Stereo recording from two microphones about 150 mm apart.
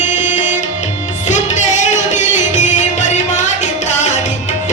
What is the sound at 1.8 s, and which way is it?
Music, 50° left (ahead or behind).